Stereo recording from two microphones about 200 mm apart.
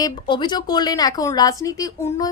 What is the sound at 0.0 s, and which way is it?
Speech, 20° left (ahead or behind).